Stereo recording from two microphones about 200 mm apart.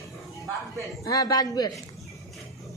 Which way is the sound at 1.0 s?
15° left (ahead or behind).